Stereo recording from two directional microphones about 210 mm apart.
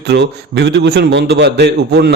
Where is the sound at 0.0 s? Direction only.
50° right (ahead or behind).